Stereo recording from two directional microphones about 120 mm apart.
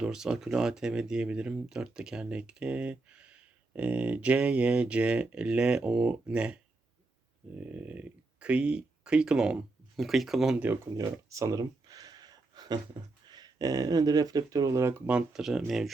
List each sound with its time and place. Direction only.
0.0 s speech: 5° right (ahead or behind)
10.9 s a sound: 25° right (ahead or behind)
13.3 s speech: 35° right (ahead or behind); by 15.9 s centre (ahead or behind)